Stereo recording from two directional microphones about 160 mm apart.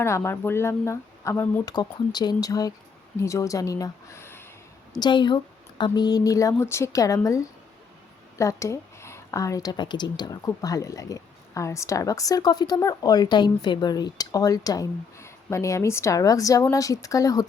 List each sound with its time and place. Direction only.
0.0 s speech: 15° left (ahead or behind)
1.7 s speech: 25° left (ahead or behind)
4.9 s speech: 30° left (ahead or behind)